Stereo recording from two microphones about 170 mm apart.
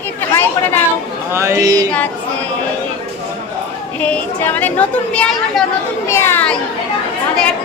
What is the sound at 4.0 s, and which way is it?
A woman's voice, 10° left (ahead or behind).